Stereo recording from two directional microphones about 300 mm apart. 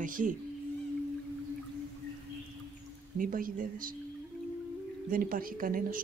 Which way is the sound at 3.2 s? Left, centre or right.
Right.